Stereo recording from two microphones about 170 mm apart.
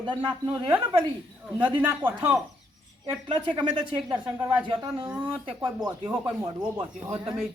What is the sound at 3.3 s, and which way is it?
Speech, 30° right (ahead or behind).